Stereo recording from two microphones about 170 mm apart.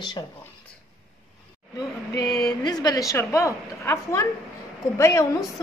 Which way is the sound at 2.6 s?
20° left (ahead or behind).